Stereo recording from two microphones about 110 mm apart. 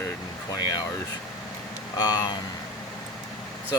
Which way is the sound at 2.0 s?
40° left (ahead or behind).